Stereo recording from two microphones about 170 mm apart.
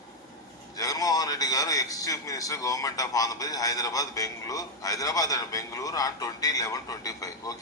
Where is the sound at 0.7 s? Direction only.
20° left (ahead or behind).